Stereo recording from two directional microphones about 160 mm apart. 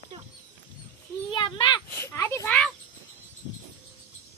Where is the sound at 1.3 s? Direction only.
30° left (ahead or behind).